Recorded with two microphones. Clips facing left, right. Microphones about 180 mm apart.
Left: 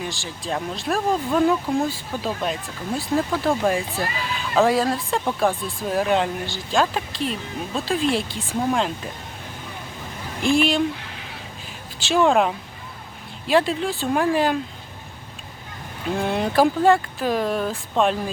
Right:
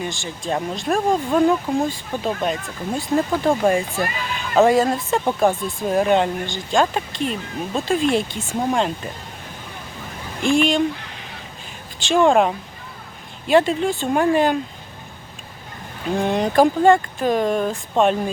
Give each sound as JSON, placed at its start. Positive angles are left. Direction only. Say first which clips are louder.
{"t": 0.0, "sound": "speech", "louder": "right 3 dB", "side_deg": 0}
{"t": 3.0, "sound": "speech", "louder": "right 3 dB", "side_deg": -15}
{"t": 3.7, "sound": "speech", "louder": "right 3 dB", "side_deg": 0}
{"t": 10.4, "sound": "speech", "louder": "right 2 dB", "side_deg": 5}
{"t": 11.9, "sound": "speech", "louder": "right 3 dB", "side_deg": 5}
{"t": 16.0, "sound": "speech", "louder": "right 3 dB", "side_deg": 0}